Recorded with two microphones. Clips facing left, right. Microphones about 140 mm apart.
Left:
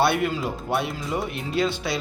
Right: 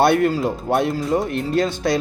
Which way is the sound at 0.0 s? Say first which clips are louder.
Right 6 dB; 45° right (ahead or behind).